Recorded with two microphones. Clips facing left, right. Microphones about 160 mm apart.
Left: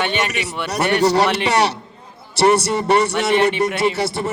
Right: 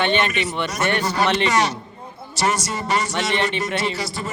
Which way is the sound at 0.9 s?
75° left (ahead or behind).